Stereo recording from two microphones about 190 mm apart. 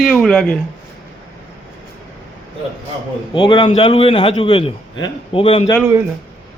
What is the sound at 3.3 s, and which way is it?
A man's voice, 25° left (ahead or behind).